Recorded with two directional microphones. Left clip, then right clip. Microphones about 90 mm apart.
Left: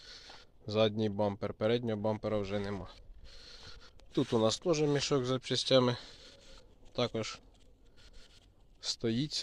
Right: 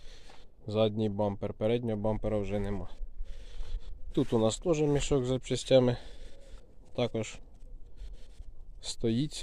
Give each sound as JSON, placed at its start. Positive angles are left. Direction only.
{"t": 0.7, "sound": "speech", "side_deg": -5}
{"t": 2.1, "sound": "speech", "side_deg": -30}
{"t": 3.6, "sound": "a sound", "side_deg": -15}
{"t": 4.3, "sound": "speech", "side_deg": -10}
{"t": 4.9, "sound": "speech", "side_deg": -25}
{"t": 7.2, "sound": "speech", "side_deg": -40}
{"t": 8.8, "sound": "speech", "side_deg": -35}